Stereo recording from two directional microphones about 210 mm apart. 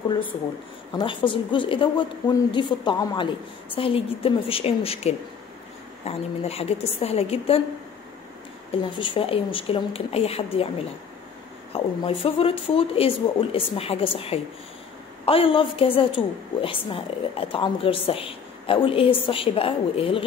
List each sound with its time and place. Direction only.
0.9 s a woman's voice: 25° left (ahead or behind)
8.9 s a woman's voice: 25° left (ahead or behind)
11.7 s a woman's voice: 25° left (ahead or behind)